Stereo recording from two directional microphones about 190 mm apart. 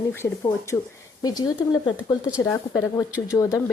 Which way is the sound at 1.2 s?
20° left (ahead or behind).